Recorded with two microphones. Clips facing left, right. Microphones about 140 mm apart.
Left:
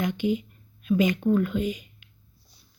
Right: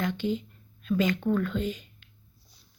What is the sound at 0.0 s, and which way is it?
Speech, 15° left (ahead or behind).